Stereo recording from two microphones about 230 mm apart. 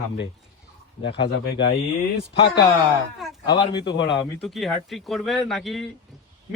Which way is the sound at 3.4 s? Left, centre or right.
Centre.